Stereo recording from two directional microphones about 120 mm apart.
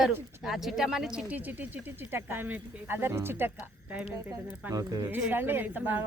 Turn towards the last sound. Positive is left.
turn(degrees=-15)  # may be behind; listen again after turning